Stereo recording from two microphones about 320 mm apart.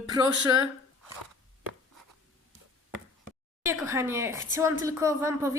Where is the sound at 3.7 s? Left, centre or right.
Centre.